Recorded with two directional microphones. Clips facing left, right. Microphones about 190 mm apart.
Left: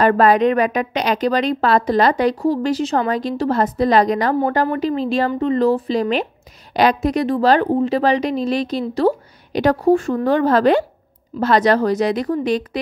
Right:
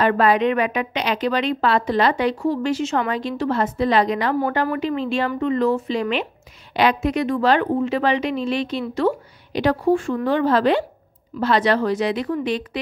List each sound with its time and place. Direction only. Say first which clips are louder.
0.0 s a woman's voice: left 4 dB; 40° left (ahead or behind)